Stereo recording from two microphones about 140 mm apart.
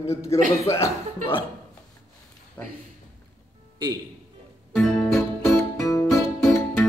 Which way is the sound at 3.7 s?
30° right (ahead or behind).